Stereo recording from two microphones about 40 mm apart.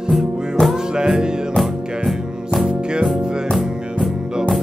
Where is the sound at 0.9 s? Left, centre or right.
Centre.